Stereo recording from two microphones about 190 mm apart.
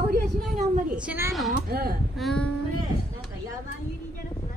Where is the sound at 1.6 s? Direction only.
55° right (ahead or behind).